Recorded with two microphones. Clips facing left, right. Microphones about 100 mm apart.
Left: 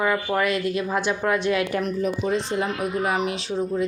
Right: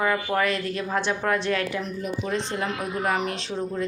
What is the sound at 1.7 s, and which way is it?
Speech, 60° left (ahead or behind).